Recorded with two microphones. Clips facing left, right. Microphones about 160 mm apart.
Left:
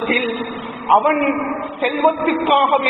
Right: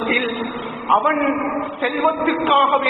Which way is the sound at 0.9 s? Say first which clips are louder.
Left 3 dB; 20° left (ahead or behind).